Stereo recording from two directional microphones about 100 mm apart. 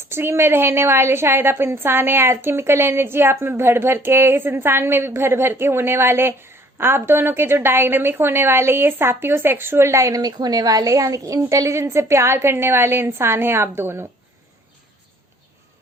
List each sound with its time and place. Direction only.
0.0 s a woman's voice: 25° right (ahead or behind)